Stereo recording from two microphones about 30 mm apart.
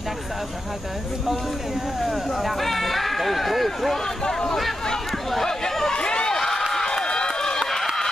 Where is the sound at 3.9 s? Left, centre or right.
Centre.